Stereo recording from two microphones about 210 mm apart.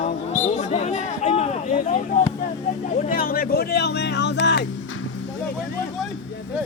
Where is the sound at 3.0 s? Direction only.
40° left (ahead or behind).